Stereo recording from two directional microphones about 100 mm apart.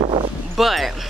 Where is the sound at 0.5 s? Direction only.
Centre (ahead or behind).